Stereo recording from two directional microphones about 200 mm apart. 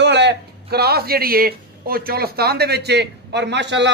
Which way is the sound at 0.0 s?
60° right (ahead or behind).